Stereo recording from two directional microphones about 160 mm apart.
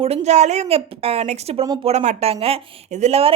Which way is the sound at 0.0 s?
40° right (ahead or behind).